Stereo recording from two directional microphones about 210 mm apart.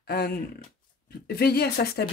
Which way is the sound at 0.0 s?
45° left (ahead or behind).